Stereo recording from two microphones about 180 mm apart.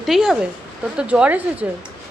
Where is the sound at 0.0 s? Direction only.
Centre (ahead or behind).